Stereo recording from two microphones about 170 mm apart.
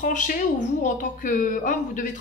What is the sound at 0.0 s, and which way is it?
A woman's voice, 50° left (ahead or behind).